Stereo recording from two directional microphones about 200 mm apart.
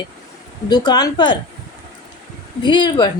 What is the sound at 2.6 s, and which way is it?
Speech, 20° left (ahead or behind).